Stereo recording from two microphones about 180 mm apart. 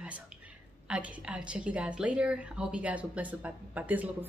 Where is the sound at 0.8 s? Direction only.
5° right (ahead or behind).